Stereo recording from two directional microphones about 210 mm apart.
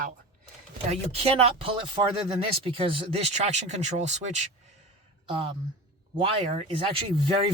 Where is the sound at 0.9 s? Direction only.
30° right (ahead or behind).